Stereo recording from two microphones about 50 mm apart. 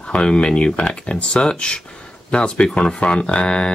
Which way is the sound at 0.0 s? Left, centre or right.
Left.